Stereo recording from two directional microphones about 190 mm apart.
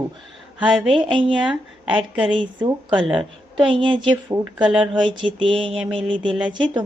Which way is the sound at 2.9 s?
Centre (ahead or behind).